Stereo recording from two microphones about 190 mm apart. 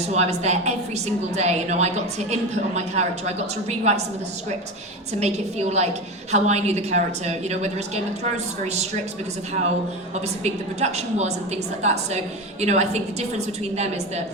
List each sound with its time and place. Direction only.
0.1 s a woman's voice: 35° right (ahead or behind)
5.2 s a woman's voice: 35° right (ahead or behind)
10.2 s a woman's voice: 35° right (ahead or behind)